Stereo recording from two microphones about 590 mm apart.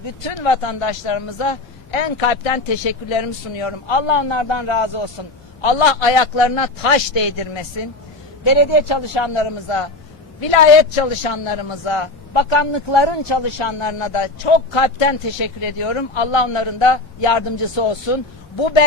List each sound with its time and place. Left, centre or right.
0.3 s speech: left
5.6 s a man's voice: left